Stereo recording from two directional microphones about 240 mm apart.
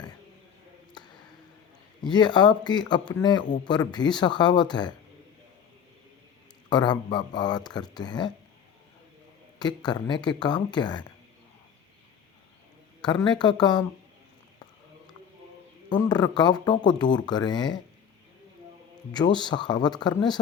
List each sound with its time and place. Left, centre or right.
2.0 s speech: centre
6.7 s speech: centre
9.6 s speech: centre
13.0 s speech: centre
15.9 s speech: centre
19.1 s speech: centre